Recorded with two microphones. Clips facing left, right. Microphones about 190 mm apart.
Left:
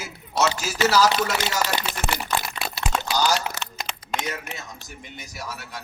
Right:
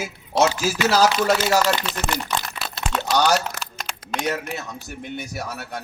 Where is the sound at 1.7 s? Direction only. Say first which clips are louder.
Right 1 dB; 10° left (ahead or behind).